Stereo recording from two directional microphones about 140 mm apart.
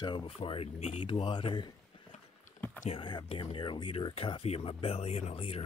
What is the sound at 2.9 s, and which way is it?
Speech, 35° left (ahead or behind).